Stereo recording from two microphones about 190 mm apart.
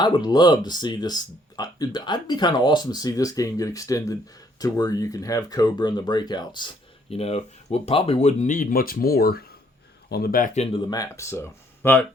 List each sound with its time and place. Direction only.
0.0 s speech: 20° left (ahead or behind)